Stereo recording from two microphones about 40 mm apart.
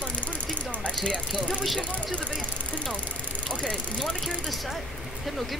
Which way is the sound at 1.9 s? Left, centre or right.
Left.